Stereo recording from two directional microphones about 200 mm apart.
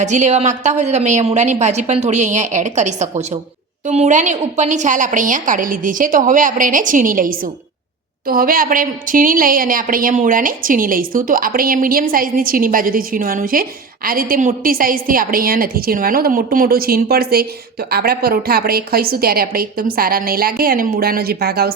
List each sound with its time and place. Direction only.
0.0 s a woman's voice: 35° right (ahead or behind); by 21.7 s 50° right (ahead or behind)